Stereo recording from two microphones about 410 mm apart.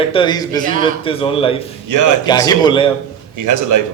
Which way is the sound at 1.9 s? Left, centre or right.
Right.